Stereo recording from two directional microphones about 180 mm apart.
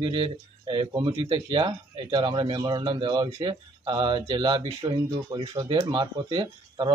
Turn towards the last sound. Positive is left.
turn(degrees=-25)  # may be behind; listen again after turning